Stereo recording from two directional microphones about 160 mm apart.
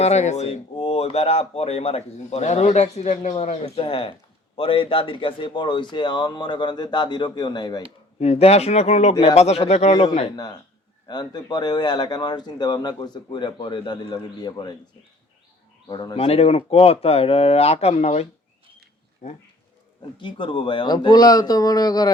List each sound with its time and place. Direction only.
0.0 s speech: 45° left (ahead or behind); by 7.8 s 25° left (ahead or behind)
8.2 s speech: 40° left (ahead or behind)
10.3 s speech: 25° left (ahead or behind)
15.9 s speech: 30° left (ahead or behind)
16.1 s speech: 40° left (ahead or behind)
20.0 s speech: 30° left (ahead or behind)